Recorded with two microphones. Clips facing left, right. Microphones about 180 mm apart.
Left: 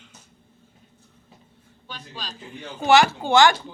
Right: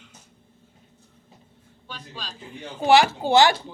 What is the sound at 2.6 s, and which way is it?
Speech, 30° right (ahead or behind).